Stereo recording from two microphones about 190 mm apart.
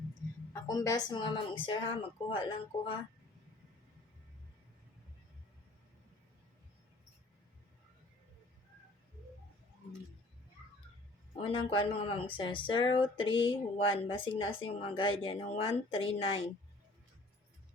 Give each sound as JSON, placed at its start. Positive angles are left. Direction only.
{"t": 0.5, "sound": "a woman's voice", "side_deg": 20}
{"t": 11.3, "sound": "a woman's voice", "side_deg": 30}